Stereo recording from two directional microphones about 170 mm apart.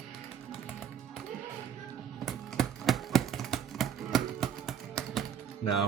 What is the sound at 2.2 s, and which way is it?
Typing, centre (ahead or behind).